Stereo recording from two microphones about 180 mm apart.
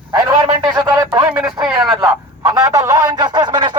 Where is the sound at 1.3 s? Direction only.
5° right (ahead or behind).